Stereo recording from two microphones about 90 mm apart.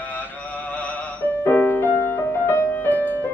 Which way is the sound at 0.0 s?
15° left (ahead or behind).